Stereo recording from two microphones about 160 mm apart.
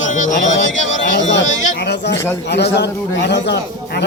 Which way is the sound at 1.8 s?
90° left.